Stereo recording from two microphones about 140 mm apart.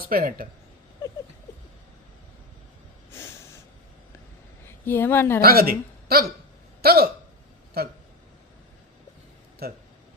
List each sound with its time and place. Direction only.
0.1 s a man's voice: 90° right
4.6 s a woman's voice: 15° left (ahead or behind)
5.4 s a man's voice: 90° right
9.6 s a man's voice: 90° right